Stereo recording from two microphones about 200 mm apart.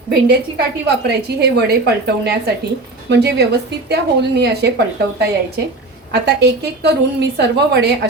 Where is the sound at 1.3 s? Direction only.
55° right (ahead or behind).